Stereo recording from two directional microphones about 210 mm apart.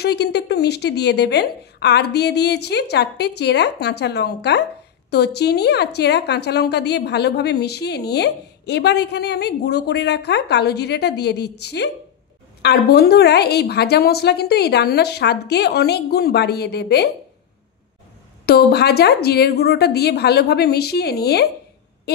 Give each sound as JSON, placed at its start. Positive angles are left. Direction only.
{"t": 0.0, "sound": "a woman's voice", "side_deg": 50}
{"t": 18.4, "sound": "a woman's voice", "side_deg": 50}